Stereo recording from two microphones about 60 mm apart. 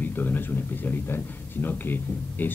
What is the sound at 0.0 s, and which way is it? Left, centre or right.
Speech, left.